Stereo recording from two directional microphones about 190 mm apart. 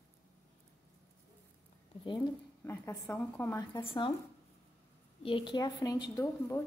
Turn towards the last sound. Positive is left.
turn(degrees=15)  # may be behind; listen again after turning